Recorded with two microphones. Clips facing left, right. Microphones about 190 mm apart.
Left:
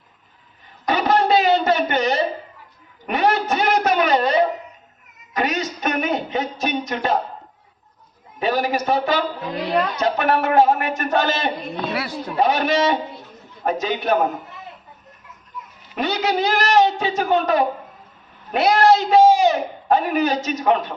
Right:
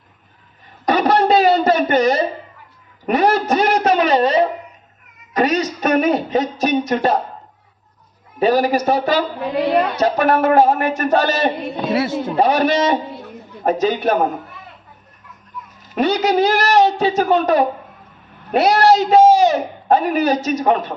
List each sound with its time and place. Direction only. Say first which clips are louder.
0.9 s a sound: right 3 dB; 40° right (ahead or behind)
5.3 s speech: right 6 dB; 40° right (ahead or behind)
8.4 s a man's voice: right 6 dB; 40° right (ahead or behind)
11.9 s speech: right 11 dB; 25° right (ahead or behind)
12.4 s a man's voice: right 2 dB; 35° right (ahead or behind)
15.9 s a man's voice: right 5 dB; 40° right (ahead or behind)
18.6 s a man's voice: right 1 dB; 40° right (ahead or behind)